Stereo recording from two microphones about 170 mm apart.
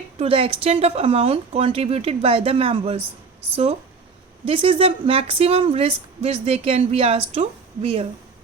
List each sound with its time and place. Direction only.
0.2 s speech: 35° right (ahead or behind)